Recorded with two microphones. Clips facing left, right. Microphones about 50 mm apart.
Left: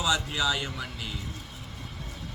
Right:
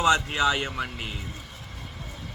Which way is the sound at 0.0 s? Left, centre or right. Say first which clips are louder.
Right 6 dB; right.